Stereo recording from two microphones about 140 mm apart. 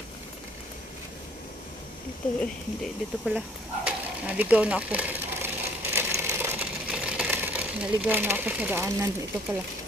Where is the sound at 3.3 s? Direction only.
5° right (ahead or behind).